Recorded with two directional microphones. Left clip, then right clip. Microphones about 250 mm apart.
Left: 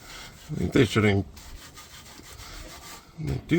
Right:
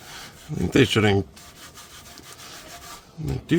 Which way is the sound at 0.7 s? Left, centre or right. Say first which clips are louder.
Right 3 dB; right.